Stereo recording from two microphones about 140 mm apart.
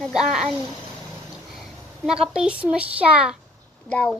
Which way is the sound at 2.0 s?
5° right (ahead or behind).